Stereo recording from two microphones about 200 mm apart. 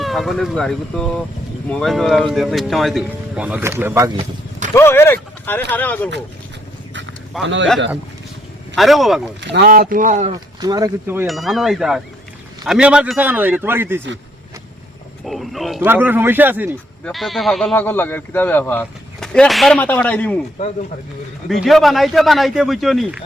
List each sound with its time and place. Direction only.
0.0 s speech: centre (ahead or behind)
4.7 s speech: 10° left (ahead or behind)
7.4 s a man's voice: 70° right (ahead or behind)
8.7 s speech: centre (ahead or behind)
9.4 s speech: 55° right (ahead or behind); by 10.3 s 35° right (ahead or behind)
10.3 s a man's voice: 20° right (ahead or behind)
11.3 s a man's voice: centre (ahead or behind)
15.2 s a man's voice: centre (ahead or behind)
21.5 s speech: centre (ahead or behind)